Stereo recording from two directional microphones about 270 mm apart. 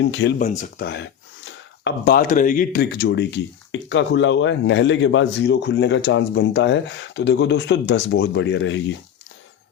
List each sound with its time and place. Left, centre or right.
0.0 s speech: left